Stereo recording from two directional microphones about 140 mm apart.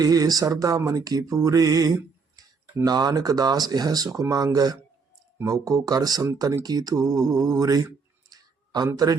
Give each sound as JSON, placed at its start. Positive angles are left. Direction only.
{"t": 0.0, "sound": "speech", "side_deg": -25}
{"t": 8.3, "sound": "clicking", "side_deg": -30}